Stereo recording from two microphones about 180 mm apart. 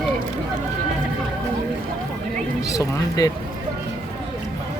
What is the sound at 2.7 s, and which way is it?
Speech, 20° left (ahead or behind).